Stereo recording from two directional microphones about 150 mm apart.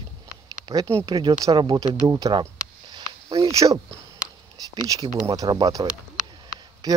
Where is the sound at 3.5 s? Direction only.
20° right (ahead or behind).